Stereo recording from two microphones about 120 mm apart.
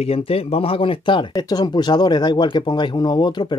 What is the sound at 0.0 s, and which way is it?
Speech, 55° left (ahead or behind).